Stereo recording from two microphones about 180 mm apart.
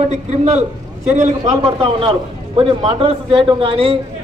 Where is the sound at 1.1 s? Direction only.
40° right (ahead or behind).